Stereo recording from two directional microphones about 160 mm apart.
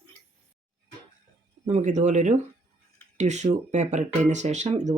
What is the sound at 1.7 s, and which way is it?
Speech, 50° right (ahead or behind).